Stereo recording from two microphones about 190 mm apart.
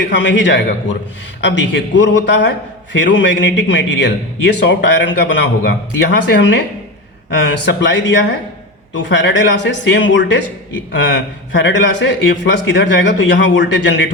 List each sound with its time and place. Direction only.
0.1 s a man's voice: 70° left (ahead or behind)